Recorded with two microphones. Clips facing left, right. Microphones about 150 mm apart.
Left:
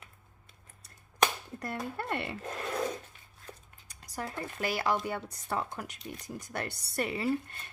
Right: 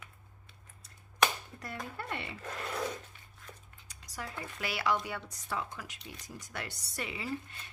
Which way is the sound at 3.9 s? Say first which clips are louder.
Left 5 dB; 55° left (ahead or behind).